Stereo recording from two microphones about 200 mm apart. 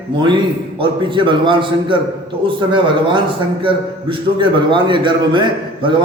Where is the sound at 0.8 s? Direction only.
25° right (ahead or behind).